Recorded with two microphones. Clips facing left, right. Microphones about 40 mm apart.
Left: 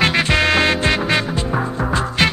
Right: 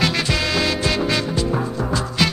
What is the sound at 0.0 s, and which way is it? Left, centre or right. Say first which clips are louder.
Music: left 5 dB; left.